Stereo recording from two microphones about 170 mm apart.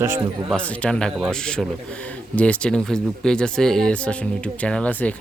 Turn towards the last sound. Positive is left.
turn(degrees=5)  # may be behind; listen again after turning